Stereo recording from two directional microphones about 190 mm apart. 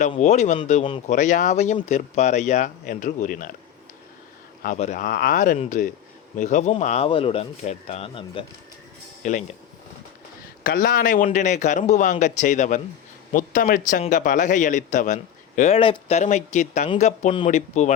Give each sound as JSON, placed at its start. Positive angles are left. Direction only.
{"t": 0.2, "sound": "a man's voice", "side_deg": 40}
{"t": 0.9, "sound": "speech", "side_deg": 25}
{"t": 1.1, "sound": "a man's voice", "side_deg": 40}
{"t": 4.6, "sound": "a man's voice", "side_deg": 40}
{"t": 9.2, "sound": "a man's voice", "side_deg": 40}
{"t": 10.6, "sound": "a man's voice", "side_deg": 50}